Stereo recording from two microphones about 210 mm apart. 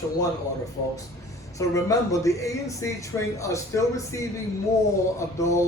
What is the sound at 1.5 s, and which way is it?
Speech, 15° left (ahead or behind).